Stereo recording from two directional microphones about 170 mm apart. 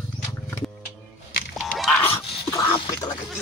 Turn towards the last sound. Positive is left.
turn(degrees=20)  # may be behind; listen again after turning